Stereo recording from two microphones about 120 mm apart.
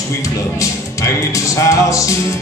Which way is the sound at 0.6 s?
25° left (ahead or behind).